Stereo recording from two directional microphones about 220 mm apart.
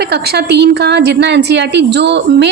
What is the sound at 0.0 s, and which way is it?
A woman's voice, 45° right (ahead or behind).